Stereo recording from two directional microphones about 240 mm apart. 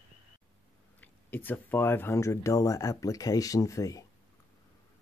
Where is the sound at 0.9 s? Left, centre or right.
Centre.